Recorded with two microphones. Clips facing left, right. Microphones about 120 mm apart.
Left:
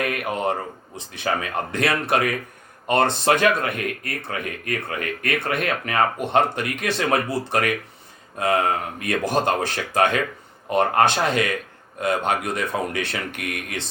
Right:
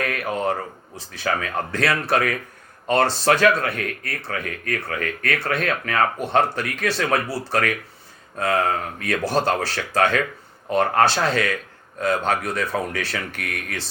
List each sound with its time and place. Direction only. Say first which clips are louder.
0.0 s a man's voice: even; 15° left (ahead or behind)